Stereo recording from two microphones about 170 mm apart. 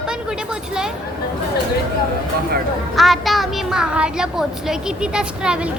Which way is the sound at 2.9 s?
Centre (ahead or behind).